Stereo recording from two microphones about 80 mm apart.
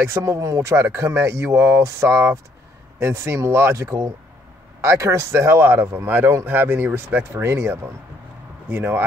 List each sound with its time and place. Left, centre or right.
0.0 s speech: right